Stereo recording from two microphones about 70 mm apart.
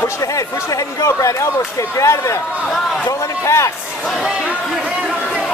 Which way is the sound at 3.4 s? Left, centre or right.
Left.